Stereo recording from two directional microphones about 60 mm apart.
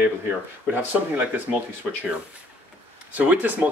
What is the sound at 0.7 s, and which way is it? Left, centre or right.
Speech, right.